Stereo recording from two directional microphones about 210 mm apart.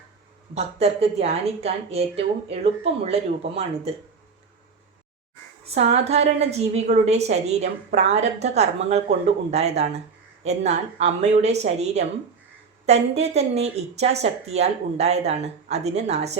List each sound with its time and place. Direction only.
0.5 s speech: 30° right (ahead or behind)
5.6 s a woman's voice: 30° right (ahead or behind)